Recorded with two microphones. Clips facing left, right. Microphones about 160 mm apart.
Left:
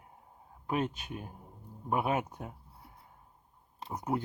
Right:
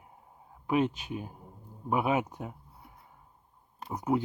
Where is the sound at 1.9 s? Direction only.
5° right (ahead or behind).